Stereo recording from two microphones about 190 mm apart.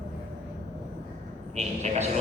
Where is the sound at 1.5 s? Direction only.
35° right (ahead or behind).